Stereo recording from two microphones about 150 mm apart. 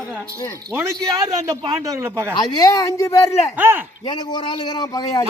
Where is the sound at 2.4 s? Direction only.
25° left (ahead or behind).